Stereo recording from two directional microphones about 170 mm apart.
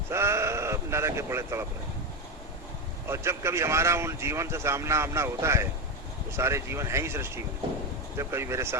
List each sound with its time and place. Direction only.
0.1 s sheep: 15° right (ahead or behind)
3.1 s speech: 15° right (ahead or behind)